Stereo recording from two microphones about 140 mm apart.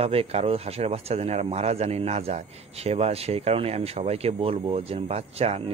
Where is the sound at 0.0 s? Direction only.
45° right (ahead or behind).